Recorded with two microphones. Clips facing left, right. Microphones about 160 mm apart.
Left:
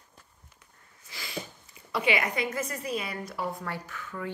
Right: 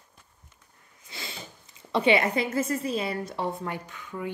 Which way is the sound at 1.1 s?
25° right (ahead or behind).